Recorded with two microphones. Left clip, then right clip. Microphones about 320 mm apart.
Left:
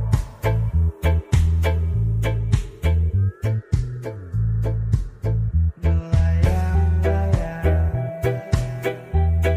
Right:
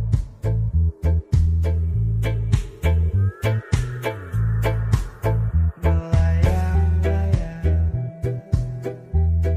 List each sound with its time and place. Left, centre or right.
0.1 s music: left
2.2 s music: centre
3.4 s music: right
4.5 s music: right
5.8 s music: centre; by 9.5 s left